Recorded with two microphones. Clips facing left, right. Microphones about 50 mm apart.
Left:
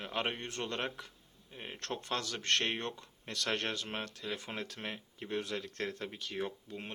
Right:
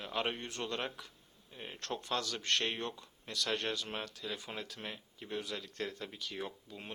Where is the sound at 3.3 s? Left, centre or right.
Left.